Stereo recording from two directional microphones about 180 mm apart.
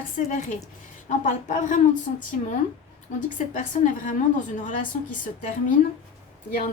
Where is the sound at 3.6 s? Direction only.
45° left (ahead or behind).